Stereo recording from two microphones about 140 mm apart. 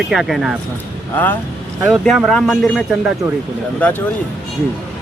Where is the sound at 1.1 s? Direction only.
15° left (ahead or behind).